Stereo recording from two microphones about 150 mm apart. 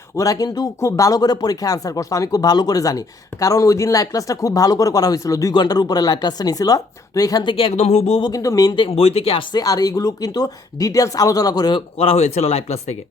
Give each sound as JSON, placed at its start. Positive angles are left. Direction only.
{"t": 0.2, "sound": "speech", "side_deg": 25}
{"t": 7.5, "sound": "speech", "side_deg": 40}
{"t": 8.3, "sound": "speech", "side_deg": 20}
{"t": 8.7, "sound": "speech", "side_deg": 35}
{"t": 11.9, "sound": "speech", "side_deg": 45}